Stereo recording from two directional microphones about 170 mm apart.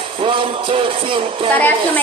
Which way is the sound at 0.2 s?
30° right (ahead or behind).